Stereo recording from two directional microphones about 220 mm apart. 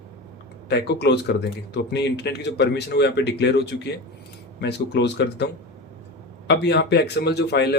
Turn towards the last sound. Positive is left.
turn(degrees=50)  # may be behind; listen again after turning